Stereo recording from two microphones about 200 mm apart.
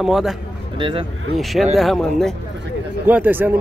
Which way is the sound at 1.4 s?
Centre (ahead or behind).